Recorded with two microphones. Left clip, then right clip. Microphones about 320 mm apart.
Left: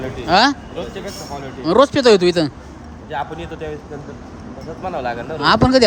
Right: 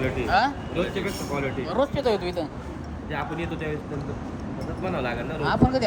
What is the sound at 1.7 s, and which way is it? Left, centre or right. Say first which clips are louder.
Speech: left 13 dB; left.